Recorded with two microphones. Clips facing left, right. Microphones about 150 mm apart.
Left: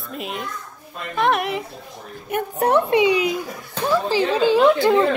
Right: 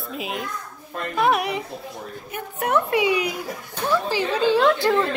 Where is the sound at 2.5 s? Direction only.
30° left (ahead or behind).